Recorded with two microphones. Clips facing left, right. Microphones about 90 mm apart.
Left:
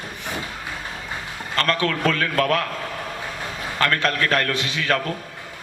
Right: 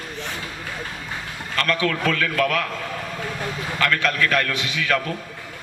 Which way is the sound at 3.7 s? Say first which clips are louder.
Even; 40° left (ahead or behind).